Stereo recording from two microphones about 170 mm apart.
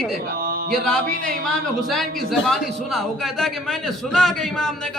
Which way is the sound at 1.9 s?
Centre (ahead or behind).